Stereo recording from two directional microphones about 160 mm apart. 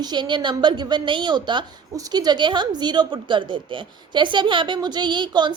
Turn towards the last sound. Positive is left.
turn(degrees=-30)  # may be behind; listen again after turning